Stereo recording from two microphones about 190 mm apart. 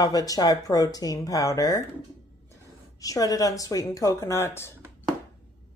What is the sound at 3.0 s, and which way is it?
Speech, 20° left (ahead or behind).